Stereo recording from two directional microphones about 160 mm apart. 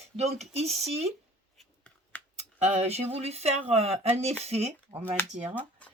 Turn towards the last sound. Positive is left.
turn(degrees=-10)  # may be behind; listen again after turning